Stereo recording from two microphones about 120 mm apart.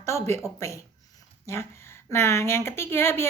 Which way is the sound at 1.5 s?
20° left (ahead or behind).